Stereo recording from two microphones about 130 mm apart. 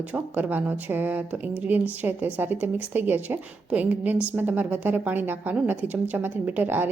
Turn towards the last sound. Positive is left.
turn(degrees=-15)  # may be behind; listen again after turning